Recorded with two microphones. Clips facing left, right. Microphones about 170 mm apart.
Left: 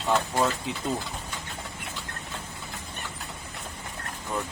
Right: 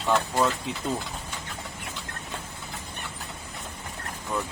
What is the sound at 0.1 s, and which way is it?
Speech, 10° left (ahead or behind).